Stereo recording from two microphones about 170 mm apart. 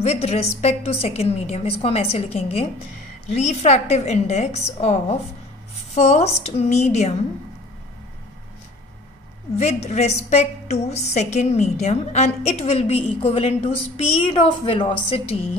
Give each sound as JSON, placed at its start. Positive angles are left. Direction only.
{"t": 0.0, "sound": "a woman's voice", "side_deg": 40}
{"t": 5.9, "sound": "a woman's voice", "side_deg": 40}
{"t": 9.6, "sound": "a woman's voice", "side_deg": 40}